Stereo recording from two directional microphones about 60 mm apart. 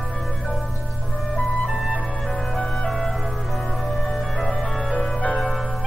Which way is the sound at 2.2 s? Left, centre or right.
Centre.